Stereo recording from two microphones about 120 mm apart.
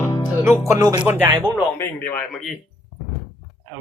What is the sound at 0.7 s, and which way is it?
Speech, 30° right (ahead or behind).